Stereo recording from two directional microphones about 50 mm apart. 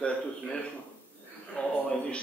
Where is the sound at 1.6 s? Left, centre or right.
Left.